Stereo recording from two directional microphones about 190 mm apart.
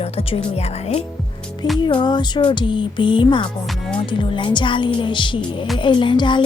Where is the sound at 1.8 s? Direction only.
25° left (ahead or behind).